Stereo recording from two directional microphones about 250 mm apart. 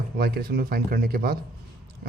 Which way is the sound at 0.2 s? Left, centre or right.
Right.